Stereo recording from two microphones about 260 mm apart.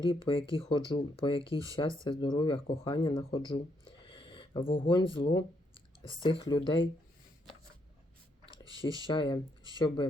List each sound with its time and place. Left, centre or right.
0.1 s speech: centre
8.6 s a sound: centre
9.0 s speech: centre